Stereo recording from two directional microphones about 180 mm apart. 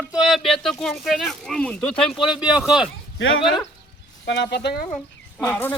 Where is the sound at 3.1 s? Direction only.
90° left.